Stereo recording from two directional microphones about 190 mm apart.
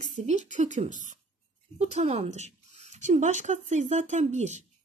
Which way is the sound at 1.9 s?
35° right (ahead or behind).